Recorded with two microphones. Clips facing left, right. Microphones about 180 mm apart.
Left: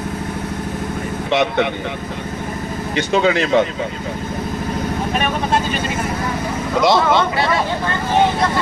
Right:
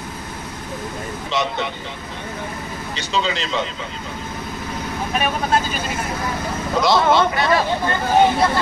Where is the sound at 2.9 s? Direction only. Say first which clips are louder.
Left 8 dB; 55° left (ahead or behind).